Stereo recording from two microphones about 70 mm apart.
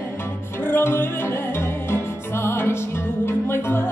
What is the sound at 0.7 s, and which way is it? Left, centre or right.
Music, left.